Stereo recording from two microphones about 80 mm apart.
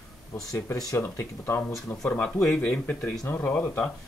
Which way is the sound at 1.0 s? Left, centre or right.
Left.